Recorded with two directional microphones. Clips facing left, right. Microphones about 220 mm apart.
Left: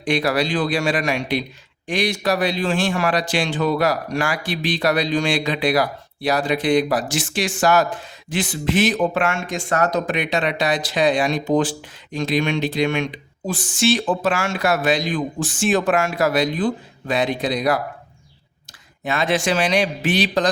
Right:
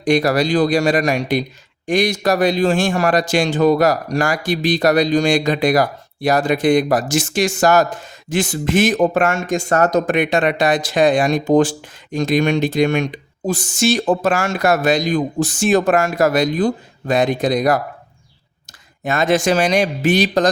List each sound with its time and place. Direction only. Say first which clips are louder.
0.0 s speech: right 5 dB; 45° right (ahead or behind)
19.0 s speech: right 4 dB; 45° right (ahead or behind)